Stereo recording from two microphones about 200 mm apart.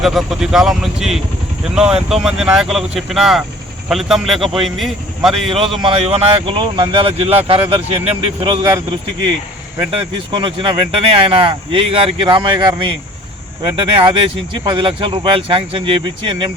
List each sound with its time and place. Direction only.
0.0 s speech: centre (ahead or behind)
5.7 s speech: 25° right (ahead or behind)
9.7 s speech: 25° right (ahead or behind)